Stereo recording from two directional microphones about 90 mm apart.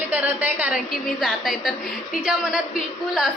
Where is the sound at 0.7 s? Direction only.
Centre (ahead or behind).